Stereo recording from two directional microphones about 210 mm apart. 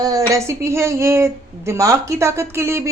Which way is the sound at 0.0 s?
15° right (ahead or behind).